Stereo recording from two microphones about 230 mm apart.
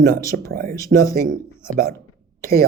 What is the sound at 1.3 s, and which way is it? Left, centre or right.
Speech, right.